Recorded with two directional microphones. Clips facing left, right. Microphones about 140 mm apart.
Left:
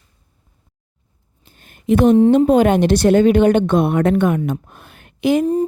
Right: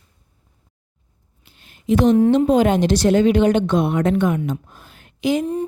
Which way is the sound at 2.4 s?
60° left (ahead or behind).